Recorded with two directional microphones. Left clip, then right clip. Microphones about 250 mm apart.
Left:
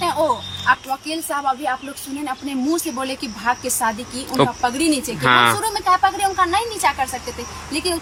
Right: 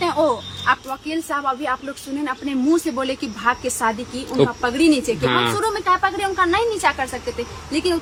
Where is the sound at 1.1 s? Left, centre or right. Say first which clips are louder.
Even; centre.